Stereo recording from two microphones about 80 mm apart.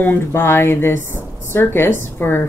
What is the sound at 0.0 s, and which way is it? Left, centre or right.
A woman's voice, left.